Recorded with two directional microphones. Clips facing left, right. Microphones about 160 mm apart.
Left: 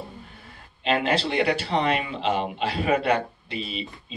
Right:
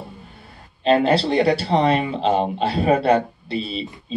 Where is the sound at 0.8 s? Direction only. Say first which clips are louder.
Right 7 dB; 35° right (ahead or behind).